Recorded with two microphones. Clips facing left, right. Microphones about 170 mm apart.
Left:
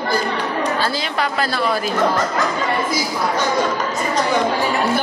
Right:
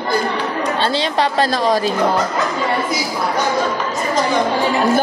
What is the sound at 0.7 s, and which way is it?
A woman's voice, 30° right (ahead or behind).